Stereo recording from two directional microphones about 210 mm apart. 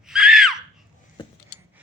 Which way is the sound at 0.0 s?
Centre (ahead or behind).